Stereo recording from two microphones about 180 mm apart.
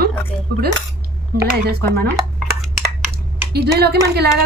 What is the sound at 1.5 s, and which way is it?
Speech, 55° right (ahead or behind).